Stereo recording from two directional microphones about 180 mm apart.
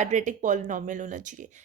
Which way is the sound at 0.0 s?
40° right (ahead or behind).